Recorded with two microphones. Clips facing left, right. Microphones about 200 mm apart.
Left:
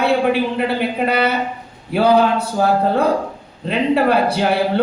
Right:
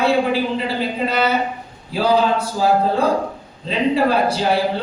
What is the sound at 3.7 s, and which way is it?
Speech, 60° left (ahead or behind).